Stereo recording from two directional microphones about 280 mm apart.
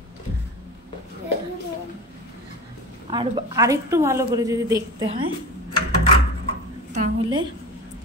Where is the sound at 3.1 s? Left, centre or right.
Centre.